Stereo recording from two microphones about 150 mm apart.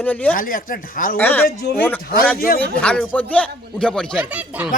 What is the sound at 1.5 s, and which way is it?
Speech, 90° left.